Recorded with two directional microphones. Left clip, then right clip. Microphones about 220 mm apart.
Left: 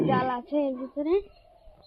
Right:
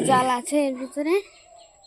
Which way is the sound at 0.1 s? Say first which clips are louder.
Right 6 dB; 30° right (ahead or behind).